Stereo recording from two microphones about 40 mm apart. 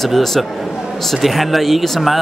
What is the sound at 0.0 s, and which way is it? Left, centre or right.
A man's voice, centre.